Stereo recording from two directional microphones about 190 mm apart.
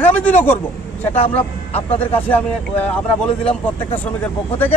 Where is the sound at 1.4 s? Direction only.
30° left (ahead or behind).